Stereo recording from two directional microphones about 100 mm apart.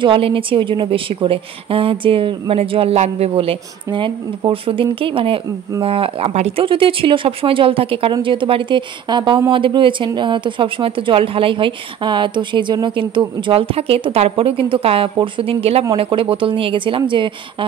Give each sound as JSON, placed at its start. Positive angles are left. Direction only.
{"t": 0.0, "sound": "a woman's voice", "side_deg": -60}
{"t": 8.1, "sound": "a woman's voice", "side_deg": -55}
{"t": 13.5, "sound": "speech", "side_deg": -70}
{"t": 16.0, "sound": "a woman's voice", "side_deg": -60}